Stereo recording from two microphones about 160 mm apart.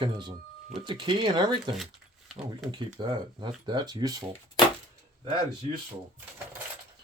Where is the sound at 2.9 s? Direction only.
30° right (ahead or behind).